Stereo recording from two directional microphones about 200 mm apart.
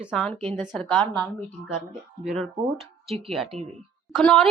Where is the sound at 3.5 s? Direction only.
30° right (ahead or behind).